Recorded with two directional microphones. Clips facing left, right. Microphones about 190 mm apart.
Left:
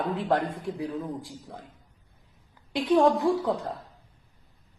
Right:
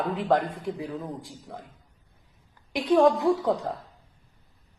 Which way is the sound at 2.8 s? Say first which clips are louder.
Right 1 dB; 20° right (ahead or behind).